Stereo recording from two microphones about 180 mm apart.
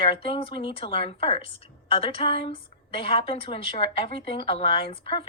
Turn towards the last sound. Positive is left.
turn(degrees=30)  # may be behind; listen again after turning